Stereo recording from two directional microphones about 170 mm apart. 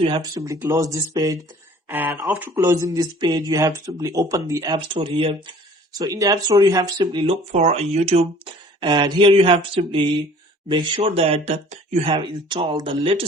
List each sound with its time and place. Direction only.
0.0 s speech: 25° right (ahead or behind)
1.9 s speech: 10° right (ahead or behind)
4.9 s speech: 30° right (ahead or behind)
7.5 s speech: 40° right (ahead or behind)
12.1 s speech: 30° right (ahead or behind)